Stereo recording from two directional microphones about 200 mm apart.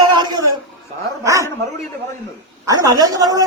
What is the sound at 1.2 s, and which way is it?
Speech, 15° right (ahead or behind).